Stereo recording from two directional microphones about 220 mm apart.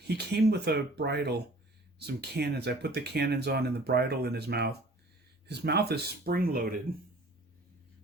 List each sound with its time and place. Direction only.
0.1 s speech: 50° right (ahead or behind)